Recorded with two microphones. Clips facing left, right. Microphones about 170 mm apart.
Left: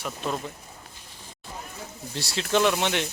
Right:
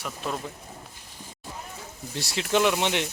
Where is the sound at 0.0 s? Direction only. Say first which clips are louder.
Left 2 dB; centre (ahead or behind).